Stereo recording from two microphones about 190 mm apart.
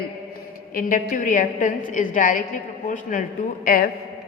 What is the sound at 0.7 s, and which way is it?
A woman's voice, 45° left (ahead or behind).